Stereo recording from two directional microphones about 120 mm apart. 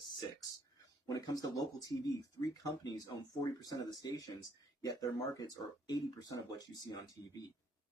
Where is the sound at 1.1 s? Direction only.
30° left (ahead or behind).